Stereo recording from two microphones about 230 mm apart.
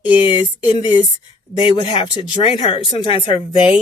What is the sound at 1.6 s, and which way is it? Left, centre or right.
Speech, left.